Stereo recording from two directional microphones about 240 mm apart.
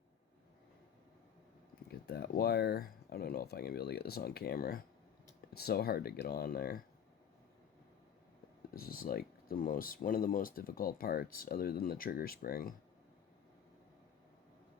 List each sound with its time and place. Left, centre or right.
1.9 s speech: left
8.7 s speech: left